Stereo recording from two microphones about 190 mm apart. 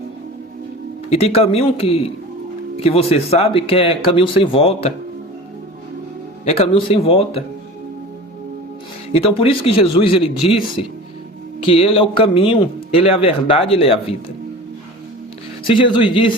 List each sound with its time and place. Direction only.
1.1 s speech: 30° left (ahead or behind)
6.4 s speech: 30° left (ahead or behind)
9.1 s speech: 30° left (ahead or behind)
15.6 s speech: 25° left (ahead or behind)